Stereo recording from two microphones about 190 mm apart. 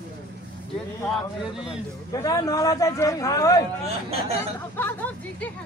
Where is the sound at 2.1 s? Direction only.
20° left (ahead or behind).